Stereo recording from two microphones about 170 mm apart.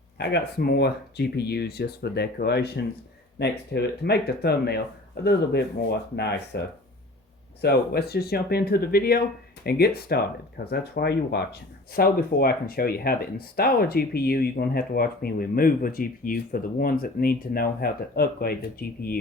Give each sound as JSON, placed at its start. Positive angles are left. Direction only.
{"t": 0.2, "sound": "speech", "side_deg": 75}
{"t": 7.6, "sound": "speech", "side_deg": 70}
{"t": 11.9, "sound": "speech", "side_deg": 65}